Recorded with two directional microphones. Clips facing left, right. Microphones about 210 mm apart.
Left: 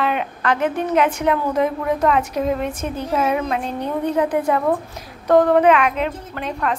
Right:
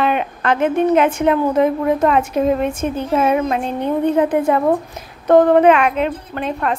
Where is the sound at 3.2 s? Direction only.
40° right (ahead or behind).